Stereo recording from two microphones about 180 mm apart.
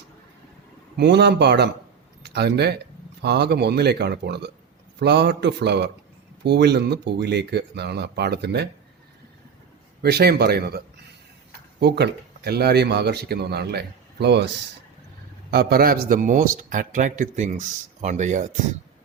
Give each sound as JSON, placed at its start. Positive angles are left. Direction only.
{"t": 0.9, "sound": "speech", "side_deg": -70}
{"t": 10.0, "sound": "speech", "side_deg": -60}